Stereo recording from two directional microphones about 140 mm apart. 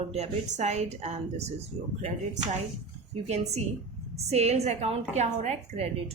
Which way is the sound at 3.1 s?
50° right (ahead or behind).